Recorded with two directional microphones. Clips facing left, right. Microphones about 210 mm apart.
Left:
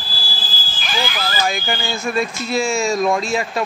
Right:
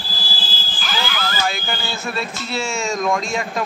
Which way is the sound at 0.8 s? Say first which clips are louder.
Left 2 dB; 20° left (ahead or behind).